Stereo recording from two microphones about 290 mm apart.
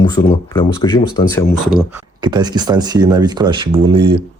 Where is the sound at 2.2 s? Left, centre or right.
Centre.